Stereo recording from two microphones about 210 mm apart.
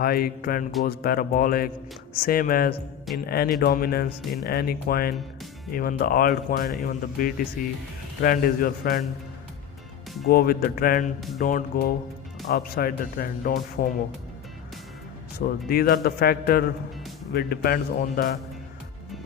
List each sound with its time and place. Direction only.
0.0 s speech: 45° left (ahead or behind)
10.2 s speech: 45° left (ahead or behind)
15.4 s speech: 45° left (ahead or behind)